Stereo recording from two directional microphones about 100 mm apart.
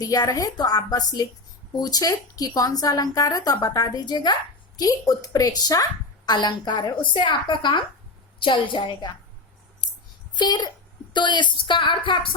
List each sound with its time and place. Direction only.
0.0 s a woman's voice: 40° left (ahead or behind)
10.3 s a woman's voice: 45° left (ahead or behind)